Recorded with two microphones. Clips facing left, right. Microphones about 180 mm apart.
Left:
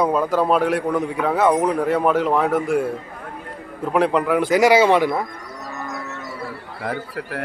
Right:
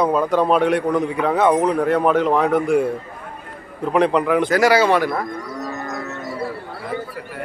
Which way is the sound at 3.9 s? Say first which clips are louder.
Right 1 dB; 5° left (ahead or behind).